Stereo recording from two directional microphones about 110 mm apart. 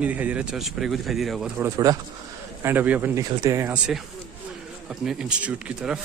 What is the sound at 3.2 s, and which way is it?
Speech, 30° right (ahead or behind).